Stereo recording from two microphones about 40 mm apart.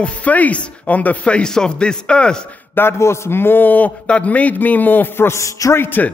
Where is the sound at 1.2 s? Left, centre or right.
Left.